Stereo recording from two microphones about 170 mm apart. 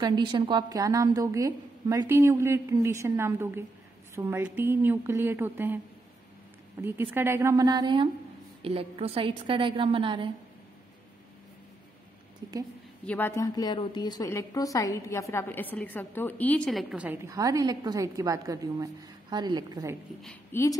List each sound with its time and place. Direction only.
0.0 s a woman's voice: 25° right (ahead or behind)
6.8 s a woman's voice: 15° right (ahead or behind); by 10.3 s 30° right (ahead or behind)
13.0 s a woman's voice: 10° left (ahead or behind)
16.9 s a woman's voice: 10° right (ahead or behind)
17.3 s a woman's voice: 20° right (ahead or behind)
20.5 s a woman's voice: 10° left (ahead or behind)